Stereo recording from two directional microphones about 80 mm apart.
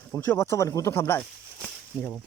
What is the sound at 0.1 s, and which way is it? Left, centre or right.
Speech, left.